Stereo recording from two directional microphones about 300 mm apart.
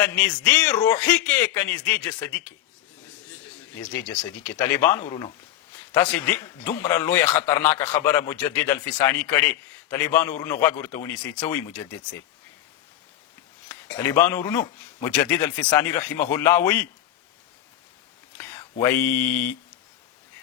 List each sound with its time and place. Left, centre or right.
0.0 s a man's voice: centre
3.8 s a man's voice: centre
13.8 s a man's voice: centre
18.3 s speech: centre